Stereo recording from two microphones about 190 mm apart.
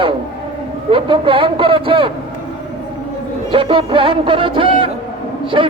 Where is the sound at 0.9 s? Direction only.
25° right (ahead or behind).